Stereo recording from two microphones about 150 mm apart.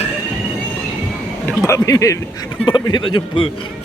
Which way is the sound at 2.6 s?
30° left (ahead or behind).